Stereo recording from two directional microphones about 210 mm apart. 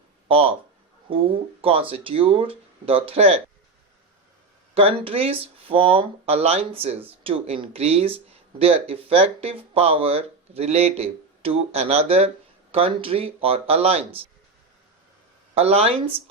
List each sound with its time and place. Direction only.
0.3 s speech: 25° right (ahead or behind)
4.7 s speech: 25° right (ahead or behind)
15.5 s speech: 30° right (ahead or behind)